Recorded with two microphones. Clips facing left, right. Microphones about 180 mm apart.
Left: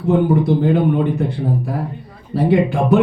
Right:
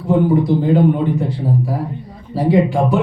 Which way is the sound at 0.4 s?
60° left (ahead or behind).